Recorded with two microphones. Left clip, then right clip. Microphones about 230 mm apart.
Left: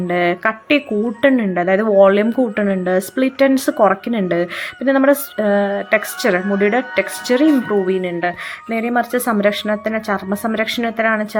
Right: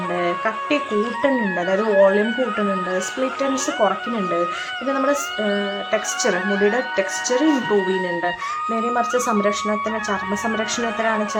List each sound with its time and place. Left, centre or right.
0.1 s speech: left